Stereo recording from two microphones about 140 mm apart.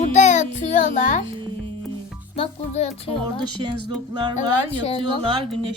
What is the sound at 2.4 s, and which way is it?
Speech, 50° left (ahead or behind).